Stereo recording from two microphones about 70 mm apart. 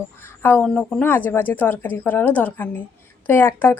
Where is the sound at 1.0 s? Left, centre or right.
Left.